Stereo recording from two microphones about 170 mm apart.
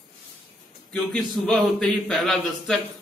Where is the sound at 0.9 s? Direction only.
Centre (ahead or behind).